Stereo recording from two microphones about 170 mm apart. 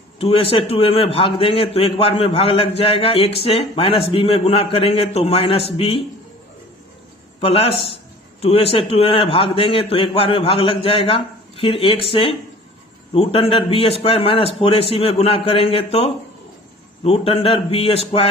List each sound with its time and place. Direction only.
0.2 s a man's voice: 35° left (ahead or behind)
7.4 s a man's voice: 35° left (ahead or behind)